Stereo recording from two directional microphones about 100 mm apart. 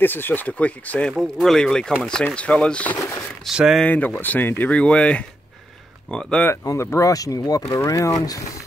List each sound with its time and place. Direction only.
0.0 s speech: 20° left (ahead or behind)
1.2 s speech: 5° left (ahead or behind)
3.0 s speech: 30° left (ahead or behind)
3.4 s speech: 5° right (ahead or behind)
3.8 s speech: 15° left (ahead or behind)
6.6 s speech: 30° left (ahead or behind)